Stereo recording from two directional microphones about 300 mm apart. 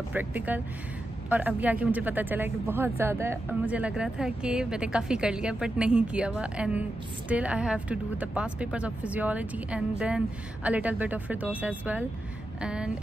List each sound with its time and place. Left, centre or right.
0.1 s speech: centre